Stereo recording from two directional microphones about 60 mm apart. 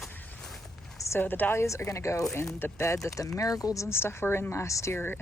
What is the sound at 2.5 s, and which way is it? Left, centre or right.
Speech, left.